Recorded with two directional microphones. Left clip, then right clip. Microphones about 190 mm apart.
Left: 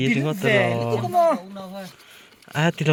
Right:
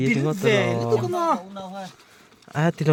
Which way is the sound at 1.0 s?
65° right (ahead or behind).